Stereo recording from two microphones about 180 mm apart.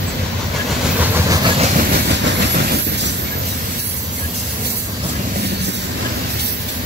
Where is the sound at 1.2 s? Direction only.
30° right (ahead or behind).